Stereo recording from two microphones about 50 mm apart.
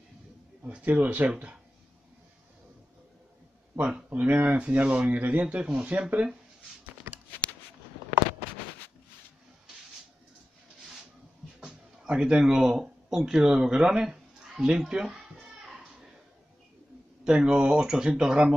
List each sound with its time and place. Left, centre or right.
0.8 s speech: right
4.1 s speech: right
11.6 s a sound: centre
17.2 s speech: centre